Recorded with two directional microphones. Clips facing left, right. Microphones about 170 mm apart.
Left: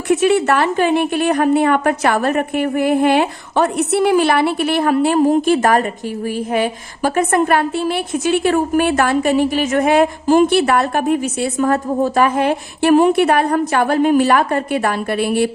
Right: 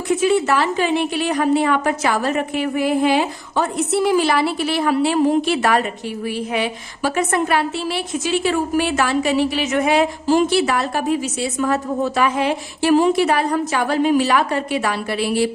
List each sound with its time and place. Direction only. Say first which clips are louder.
0.1 s a woman's voice: left 3 dB; 70° left (ahead or behind)